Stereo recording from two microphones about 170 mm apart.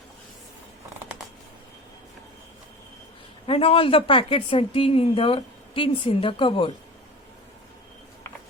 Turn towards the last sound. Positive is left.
turn(degrees=30)  # may be behind; listen again after turning